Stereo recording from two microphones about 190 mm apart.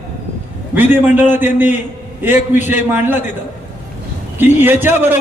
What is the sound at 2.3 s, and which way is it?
Speech, 40° left (ahead or behind).